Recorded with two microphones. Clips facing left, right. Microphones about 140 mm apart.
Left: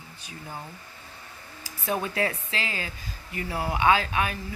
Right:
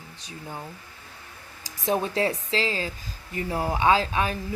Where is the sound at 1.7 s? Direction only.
35° right (ahead or behind).